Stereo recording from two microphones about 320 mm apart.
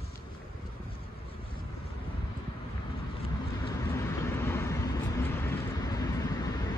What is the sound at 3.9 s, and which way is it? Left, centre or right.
Vehicle, centre.